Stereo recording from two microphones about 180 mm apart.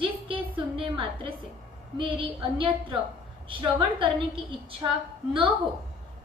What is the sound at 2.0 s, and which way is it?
A woman's voice, 30° right (ahead or behind).